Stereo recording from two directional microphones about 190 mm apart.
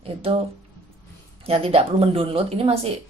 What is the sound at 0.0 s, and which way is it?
Speech, 30° right (ahead or behind).